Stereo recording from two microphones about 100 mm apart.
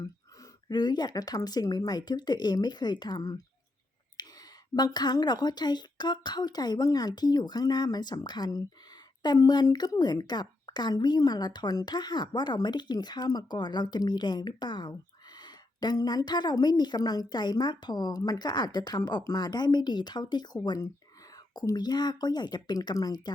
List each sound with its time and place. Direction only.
0.7 s a woman's voice: 45° left (ahead or behind)